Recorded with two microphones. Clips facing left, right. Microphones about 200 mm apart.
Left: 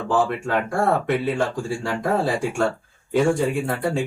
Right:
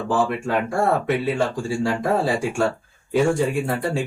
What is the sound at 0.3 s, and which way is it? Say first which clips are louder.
Speech: right 1 dB; 5° right (ahead or behind).